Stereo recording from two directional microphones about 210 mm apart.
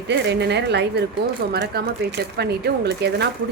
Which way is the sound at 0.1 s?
55° right (ahead or behind).